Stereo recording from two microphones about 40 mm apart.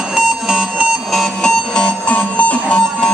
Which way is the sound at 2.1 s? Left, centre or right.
Left.